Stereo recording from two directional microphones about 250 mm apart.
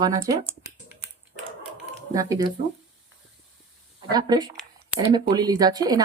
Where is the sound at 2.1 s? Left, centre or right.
Centre.